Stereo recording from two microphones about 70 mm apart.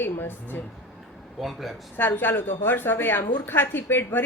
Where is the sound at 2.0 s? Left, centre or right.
Left.